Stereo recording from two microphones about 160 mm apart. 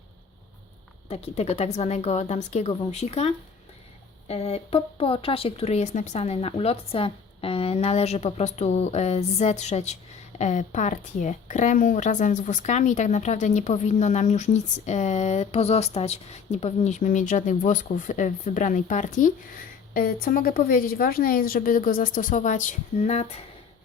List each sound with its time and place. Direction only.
1.0 s speech: 40° left (ahead or behind)
19.9 s speech: 65° left (ahead or behind); by 23.3 s 45° left (ahead or behind)